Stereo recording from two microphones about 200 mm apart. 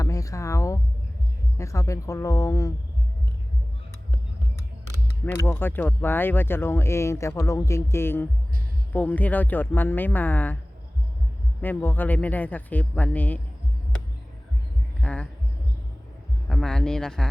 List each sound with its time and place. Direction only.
0.0 s a sound: 15° left (ahead or behind)
1.5 s speech: 15° left (ahead or behind)
5.2 s speech: 10° left (ahead or behind)
11.6 s speech: 10° left (ahead or behind)
15.0 s speech: 5° left (ahead or behind)
16.5 s speech: centre (ahead or behind)